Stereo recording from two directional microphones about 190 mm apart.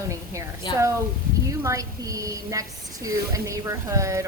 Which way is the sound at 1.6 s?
15° right (ahead or behind).